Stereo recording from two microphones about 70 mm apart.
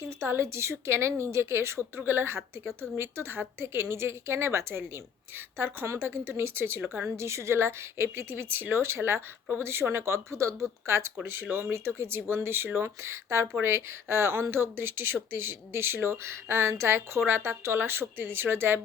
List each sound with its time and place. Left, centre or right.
0.1 s speech: right